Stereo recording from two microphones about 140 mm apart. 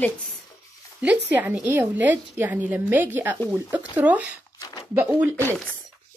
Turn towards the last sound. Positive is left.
turn(degrees=-15)  # may be behind; listen again after turning